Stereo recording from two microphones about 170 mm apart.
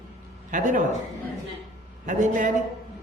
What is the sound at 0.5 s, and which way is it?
Speech, 50° right (ahead or behind).